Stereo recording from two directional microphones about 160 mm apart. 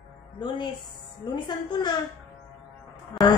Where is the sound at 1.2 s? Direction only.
30° left (ahead or behind).